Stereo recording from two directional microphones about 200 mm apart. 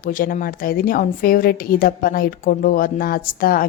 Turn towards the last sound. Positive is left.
turn(degrees=45)  # may be behind; listen again after turning